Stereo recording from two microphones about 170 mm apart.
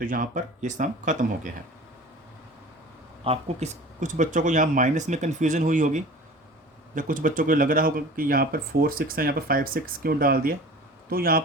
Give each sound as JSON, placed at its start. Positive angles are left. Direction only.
{"t": 0.0, "sound": "speech", "side_deg": -50}
{"t": 3.2, "sound": "speech", "side_deg": -45}